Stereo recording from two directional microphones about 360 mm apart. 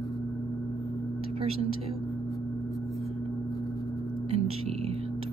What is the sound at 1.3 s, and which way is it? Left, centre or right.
Speech, centre.